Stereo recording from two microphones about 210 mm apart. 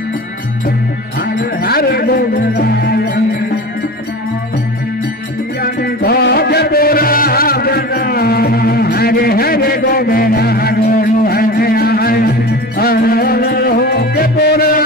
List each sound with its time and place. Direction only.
1.4 s music: 45° left (ahead or behind)
5.6 s music: 50° left (ahead or behind)